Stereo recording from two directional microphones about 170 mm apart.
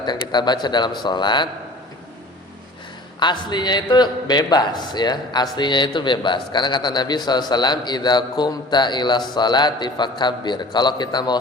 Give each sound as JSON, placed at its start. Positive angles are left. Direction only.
{"t": 0.3, "sound": "a man's voice", "side_deg": 25}
{"t": 3.2, "sound": "a man's voice", "side_deg": 25}